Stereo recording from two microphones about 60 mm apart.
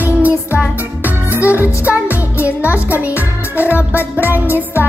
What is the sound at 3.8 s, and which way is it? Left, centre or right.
Music, left.